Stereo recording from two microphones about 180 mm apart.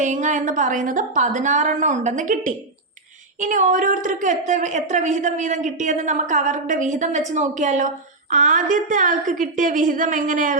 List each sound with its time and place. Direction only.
0.0 s a woman's voice: 45° right (ahead or behind)